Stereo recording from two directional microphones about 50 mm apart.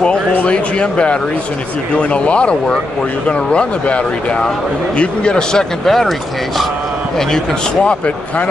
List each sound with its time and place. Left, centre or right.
0.0 s speech: left